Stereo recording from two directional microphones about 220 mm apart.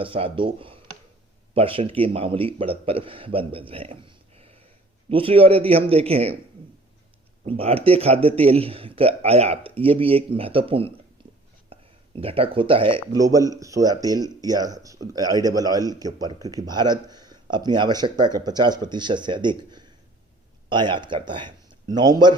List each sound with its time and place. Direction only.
0.0 s a man's voice: 25° right (ahead or behind)
7.4 s a man's voice: 25° right (ahead or behind)